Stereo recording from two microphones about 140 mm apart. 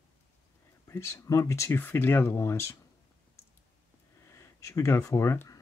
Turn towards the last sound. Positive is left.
turn(degrees=20)  # may be behind; listen again after turning